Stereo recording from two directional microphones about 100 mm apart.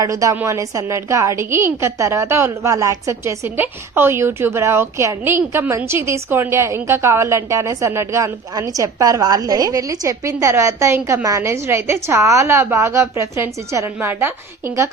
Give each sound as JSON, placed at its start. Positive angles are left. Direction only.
{"t": 0.0, "sound": "a woman's voice", "side_deg": -35}